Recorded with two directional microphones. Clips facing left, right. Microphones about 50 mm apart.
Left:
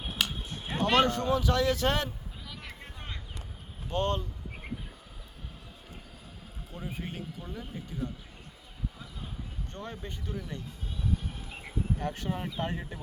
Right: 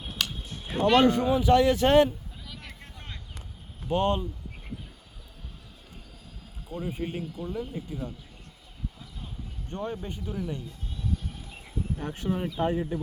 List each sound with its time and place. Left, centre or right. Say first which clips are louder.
0.0 s a sound: even; centre
0.9 s speech: right 5 dB; centre
2.5 s vehicle: even; centre
3.8 s speech: right 5 dB; centre
6.7 s speech: right 7 dB; centre
9.6 s speech: right 9 dB; centre
10.1 s speech: right 5 dB; centre
11.9 s speech: right 3 dB; centre
12.7 s speech: right 9 dB; centre